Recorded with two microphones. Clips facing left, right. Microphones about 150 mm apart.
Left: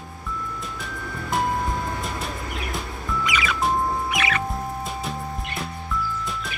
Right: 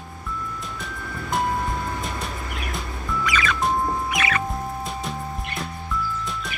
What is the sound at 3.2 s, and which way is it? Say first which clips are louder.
Music: right 2 dB; 15° left (ahead or behind).